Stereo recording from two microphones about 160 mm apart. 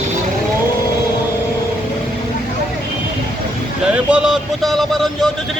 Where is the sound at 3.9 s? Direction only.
5° right (ahead or behind).